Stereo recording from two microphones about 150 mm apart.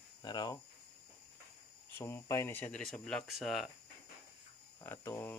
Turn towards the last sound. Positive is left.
turn(degrees=15)  # may be behind; listen again after turning